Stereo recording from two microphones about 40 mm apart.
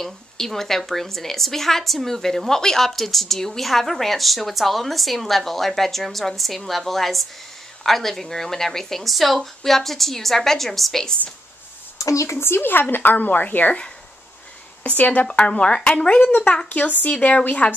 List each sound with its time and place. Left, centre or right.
0.0 s a woman's voice: centre
12.4 s speech: left
12.9 s speech: left
14.8 s speech: left
15.2 s speech: left
16.6 s speech: left